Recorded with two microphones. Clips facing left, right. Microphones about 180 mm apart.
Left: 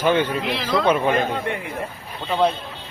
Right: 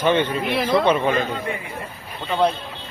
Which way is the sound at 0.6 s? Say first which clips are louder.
Right 2 dB; 25° right (ahead or behind).